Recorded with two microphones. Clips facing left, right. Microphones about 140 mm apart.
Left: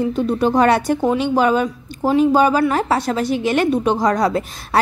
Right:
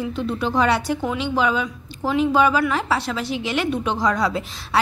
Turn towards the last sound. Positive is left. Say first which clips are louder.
# left 4 dB
turn(degrees=45)  # may be behind; listen again after turning